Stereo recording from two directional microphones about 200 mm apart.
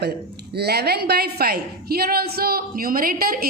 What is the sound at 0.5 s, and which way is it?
A woman's voice, 55° right (ahead or behind).